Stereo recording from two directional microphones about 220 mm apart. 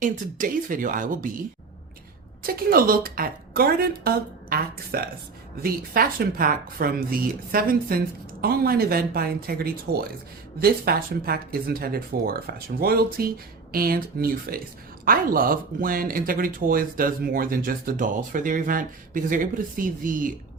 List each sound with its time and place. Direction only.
0.0 s speech: 40° right (ahead or behind)
2.6 s speech: 40° right (ahead or behind)